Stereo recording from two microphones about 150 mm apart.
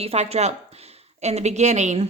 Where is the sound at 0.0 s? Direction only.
45° right (ahead or behind).